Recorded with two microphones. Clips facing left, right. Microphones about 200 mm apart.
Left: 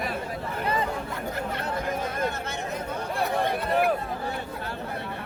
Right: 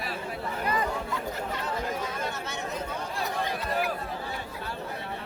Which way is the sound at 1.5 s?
55° left (ahead or behind).